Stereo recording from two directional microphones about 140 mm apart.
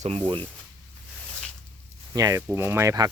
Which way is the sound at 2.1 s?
25° right (ahead or behind).